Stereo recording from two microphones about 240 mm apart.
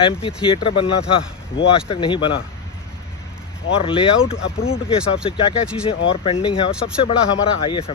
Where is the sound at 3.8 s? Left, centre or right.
Left.